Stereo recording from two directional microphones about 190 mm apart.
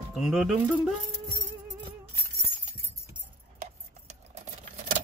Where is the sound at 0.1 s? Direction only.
Centre (ahead or behind).